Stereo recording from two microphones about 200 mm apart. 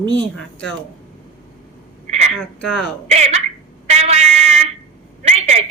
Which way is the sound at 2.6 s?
5° left (ahead or behind).